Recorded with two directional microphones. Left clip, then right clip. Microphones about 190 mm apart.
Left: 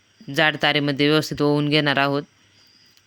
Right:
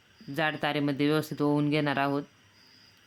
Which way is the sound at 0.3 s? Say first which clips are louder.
Left 10 dB; 30° left (ahead or behind).